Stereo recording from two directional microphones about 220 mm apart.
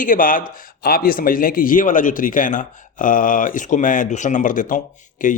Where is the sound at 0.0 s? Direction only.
40° left (ahead or behind).